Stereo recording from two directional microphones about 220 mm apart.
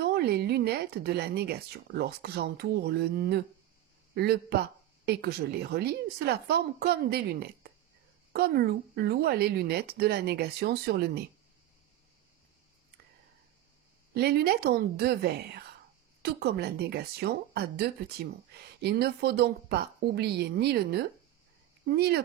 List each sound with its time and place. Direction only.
0.1 s speech: 45° right (ahead or behind)
14.1 s speech: 45° right (ahead or behind)